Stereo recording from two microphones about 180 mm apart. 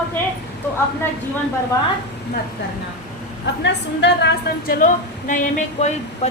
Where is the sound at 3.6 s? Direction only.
75° left (ahead or behind).